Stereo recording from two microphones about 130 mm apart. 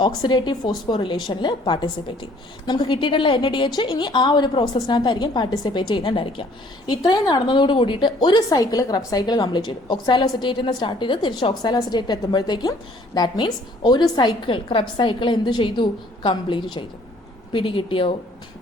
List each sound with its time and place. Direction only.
0.2 s a woman's voice: 35° left (ahead or behind)